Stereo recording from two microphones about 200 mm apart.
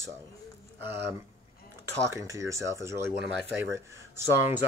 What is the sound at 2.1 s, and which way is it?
Speech, 15° right (ahead or behind).